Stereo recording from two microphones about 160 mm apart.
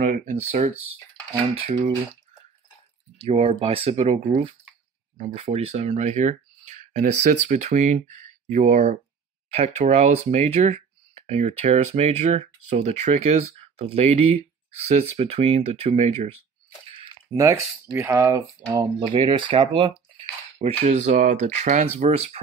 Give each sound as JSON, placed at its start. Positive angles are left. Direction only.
{"t": 0.0, "sound": "speech", "side_deg": -55}
{"t": 3.3, "sound": "speech", "side_deg": -35}
{"t": 17.0, "sound": "speech", "side_deg": -25}